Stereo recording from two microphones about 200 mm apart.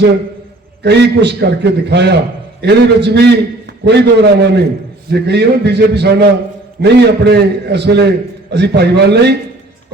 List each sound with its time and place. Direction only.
0.8 s a man's voice: 55° right (ahead or behind)